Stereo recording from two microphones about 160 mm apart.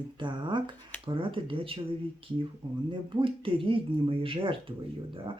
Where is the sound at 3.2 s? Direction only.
35° right (ahead or behind).